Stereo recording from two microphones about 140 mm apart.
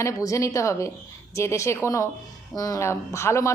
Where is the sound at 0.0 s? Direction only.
20° left (ahead or behind).